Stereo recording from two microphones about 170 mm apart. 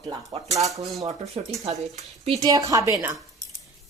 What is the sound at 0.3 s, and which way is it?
Speech, 35° right (ahead or behind).